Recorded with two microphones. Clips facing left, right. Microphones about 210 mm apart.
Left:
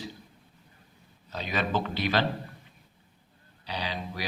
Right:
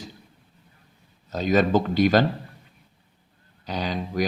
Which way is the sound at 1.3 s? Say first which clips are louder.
Right 10 dB; 45° right (ahead or behind).